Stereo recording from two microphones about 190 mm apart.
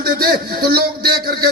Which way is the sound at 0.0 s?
55° right (ahead or behind).